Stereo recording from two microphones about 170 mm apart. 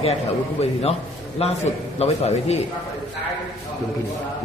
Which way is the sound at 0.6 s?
35° left (ahead or behind).